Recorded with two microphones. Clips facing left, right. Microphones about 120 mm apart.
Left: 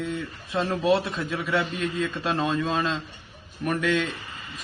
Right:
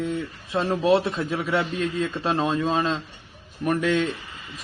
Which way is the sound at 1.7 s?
35° right (ahead or behind).